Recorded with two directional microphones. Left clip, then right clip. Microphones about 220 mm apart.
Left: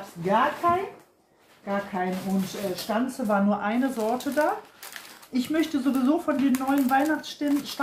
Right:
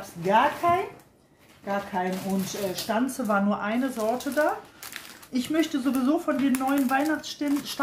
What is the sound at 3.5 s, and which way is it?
Speech, 10° right (ahead or behind).